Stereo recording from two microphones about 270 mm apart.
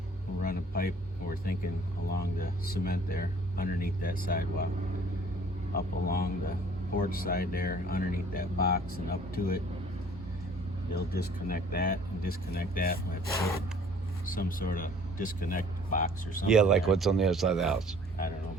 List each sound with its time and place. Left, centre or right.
0.4 s speech: left
5.7 s speech: left
10.9 s speech: left
14.3 s speech: left
16.5 s speech: centre